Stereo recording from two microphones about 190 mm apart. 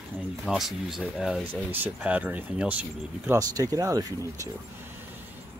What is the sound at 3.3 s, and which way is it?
A man's voice, 20° right (ahead or behind).